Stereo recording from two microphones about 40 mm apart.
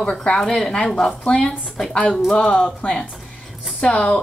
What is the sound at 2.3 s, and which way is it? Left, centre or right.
Speech, left.